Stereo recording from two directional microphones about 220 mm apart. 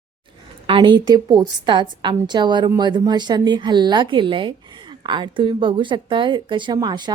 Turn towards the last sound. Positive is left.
turn(degrees=-20)  # may be behind; listen again after turning